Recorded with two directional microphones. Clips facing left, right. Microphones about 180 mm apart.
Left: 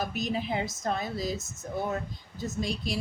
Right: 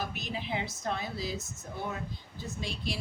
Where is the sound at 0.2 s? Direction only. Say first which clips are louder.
Left 5 dB; 40° left (ahead or behind).